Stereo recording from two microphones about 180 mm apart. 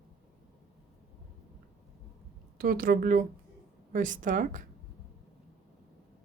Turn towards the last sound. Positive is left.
turn(degrees=-45)  # may be behind; listen again after turning